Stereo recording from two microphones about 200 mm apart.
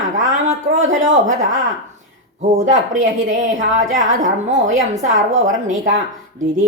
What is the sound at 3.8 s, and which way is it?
Speech, 40° right (ahead or behind).